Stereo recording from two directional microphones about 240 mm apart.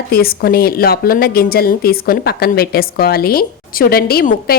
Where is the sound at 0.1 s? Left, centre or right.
Left.